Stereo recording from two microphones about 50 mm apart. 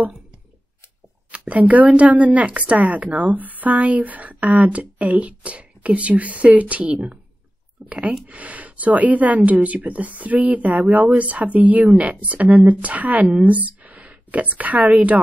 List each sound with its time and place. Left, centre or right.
1.3 s speech: right
7.8 s a sound: right
8.3 s speech: right